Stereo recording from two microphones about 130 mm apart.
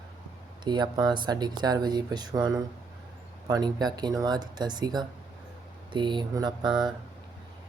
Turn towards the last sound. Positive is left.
turn(degrees=-35)  # may be behind; listen again after turning